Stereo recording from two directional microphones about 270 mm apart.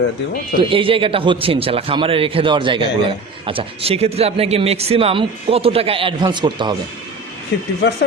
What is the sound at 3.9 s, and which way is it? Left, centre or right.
Speech, right.